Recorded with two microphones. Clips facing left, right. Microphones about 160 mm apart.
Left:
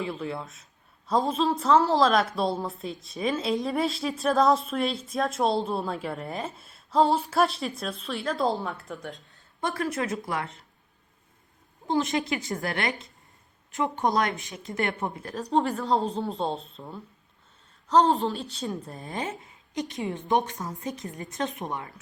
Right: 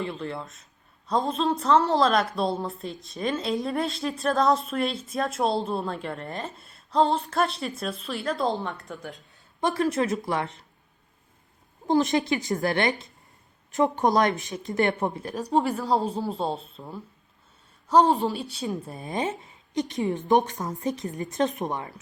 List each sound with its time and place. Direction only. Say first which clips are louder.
0.0 s a woman's voice: even; 5° left (ahead or behind)
9.6 s a woman's voice: right 5 dB; 20° right (ahead or behind)
11.9 s a woman's voice: right 4 dB; 35° right (ahead or behind)
13.7 s a woman's voice: right 4 dB; 40° right (ahead or behind)
14.8 s a woman's voice: right 5 dB; 35° right (ahead or behind)
15.2 s speech: right 3 dB; 15° right (ahead or behind)
15.5 s a woman's voice: right 1 dB; 5° right (ahead or behind)
17.9 s a woman's voice: right 1 dB; 10° right (ahead or behind)
19.0 s a woman's voice: right 5 dB; 20° right (ahead or behind)
19.7 s a woman's voice: right 4 dB; 40° right (ahead or behind)
20.6 s a woman's voice: right 5 dB; 30° right (ahead or behind)